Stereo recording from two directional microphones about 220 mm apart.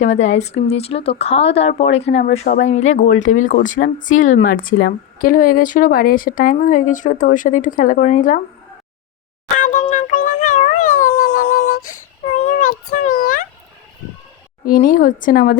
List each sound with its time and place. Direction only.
0.0 s speech: 30° left (ahead or behind)
9.6 s a sound: 35° left (ahead or behind)
9.9 s music: 35° left (ahead or behind)
14.6 s speech: 40° left (ahead or behind)